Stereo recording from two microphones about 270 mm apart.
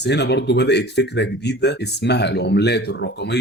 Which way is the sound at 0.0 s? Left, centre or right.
Left.